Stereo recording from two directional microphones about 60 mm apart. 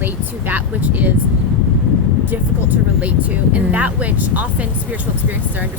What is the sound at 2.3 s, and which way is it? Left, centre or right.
Speech, right.